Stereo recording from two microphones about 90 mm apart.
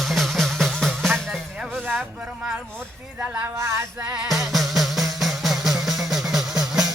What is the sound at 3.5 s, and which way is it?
Female singing, 35° right (ahead or behind).